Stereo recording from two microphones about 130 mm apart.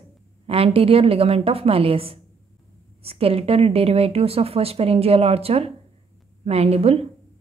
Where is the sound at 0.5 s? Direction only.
50° right (ahead or behind).